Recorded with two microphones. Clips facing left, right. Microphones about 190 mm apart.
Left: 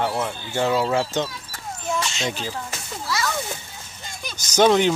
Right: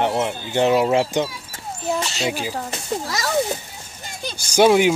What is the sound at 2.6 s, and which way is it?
A child's voice, 40° right (ahead or behind).